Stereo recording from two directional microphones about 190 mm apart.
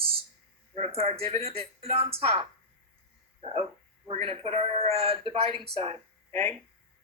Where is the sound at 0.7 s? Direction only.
35° right (ahead or behind).